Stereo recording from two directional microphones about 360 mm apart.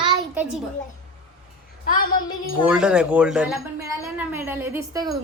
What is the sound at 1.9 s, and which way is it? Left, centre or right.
Speech, left.